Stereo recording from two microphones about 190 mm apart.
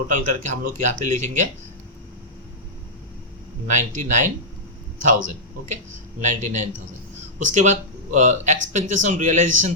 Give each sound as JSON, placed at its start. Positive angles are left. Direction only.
{"t": 0.1, "sound": "speech", "side_deg": -40}
{"t": 3.7, "sound": "speech", "side_deg": -40}